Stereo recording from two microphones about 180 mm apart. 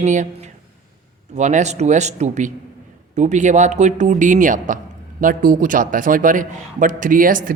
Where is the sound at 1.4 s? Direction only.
40° right (ahead or behind).